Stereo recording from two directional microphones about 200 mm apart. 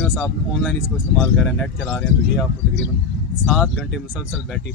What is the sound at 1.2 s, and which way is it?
Speech, centre (ahead or behind).